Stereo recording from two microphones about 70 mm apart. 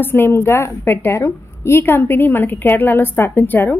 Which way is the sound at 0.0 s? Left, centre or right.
Left.